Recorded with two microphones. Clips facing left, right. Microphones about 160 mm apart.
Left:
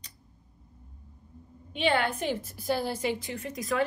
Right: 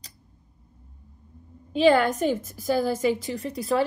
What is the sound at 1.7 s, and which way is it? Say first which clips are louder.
A woman's voice: right 8 dB; 40° right (ahead or behind).